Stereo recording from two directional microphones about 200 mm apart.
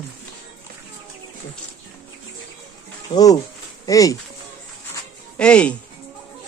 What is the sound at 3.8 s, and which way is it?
Speech, 15° left (ahead or behind).